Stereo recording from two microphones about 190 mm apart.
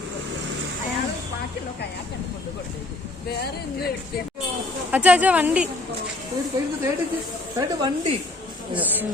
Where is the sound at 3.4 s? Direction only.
55° left (ahead or behind).